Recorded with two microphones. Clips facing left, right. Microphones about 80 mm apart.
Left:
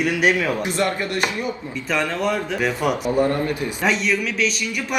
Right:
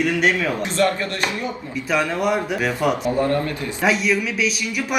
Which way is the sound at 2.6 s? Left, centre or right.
Centre.